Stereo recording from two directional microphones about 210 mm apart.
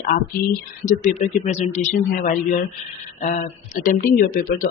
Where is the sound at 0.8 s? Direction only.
35° left (ahead or behind).